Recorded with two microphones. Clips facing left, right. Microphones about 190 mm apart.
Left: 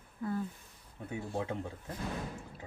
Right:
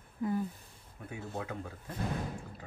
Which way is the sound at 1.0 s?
25° left (ahead or behind).